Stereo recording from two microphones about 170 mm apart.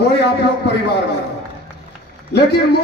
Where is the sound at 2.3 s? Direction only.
70° left (ahead or behind).